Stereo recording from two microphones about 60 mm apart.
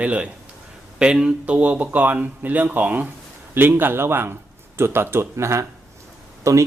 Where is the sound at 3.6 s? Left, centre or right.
Right.